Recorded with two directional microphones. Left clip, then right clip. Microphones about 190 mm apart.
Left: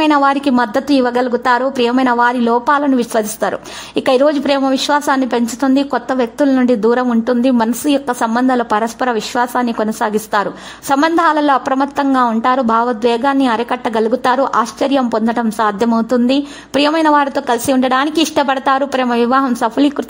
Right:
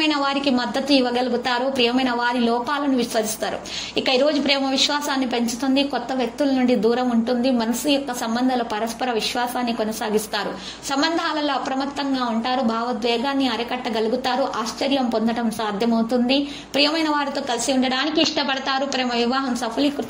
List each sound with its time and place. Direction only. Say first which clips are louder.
0.0 s a woman's voice: left 8 dB; 50° left (ahead or behind)